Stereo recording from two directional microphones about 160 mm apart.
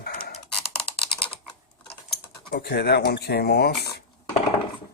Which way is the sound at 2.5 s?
90° left.